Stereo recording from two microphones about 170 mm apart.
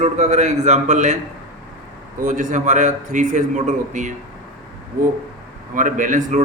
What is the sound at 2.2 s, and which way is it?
A man's voice, 50° right (ahead or behind).